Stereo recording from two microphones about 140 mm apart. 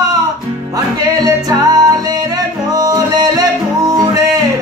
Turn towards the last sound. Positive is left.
turn(degrees=-25)  # may be behind; listen again after turning